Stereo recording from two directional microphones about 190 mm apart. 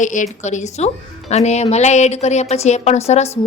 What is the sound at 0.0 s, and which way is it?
A woman's voice, 40° left (ahead or behind).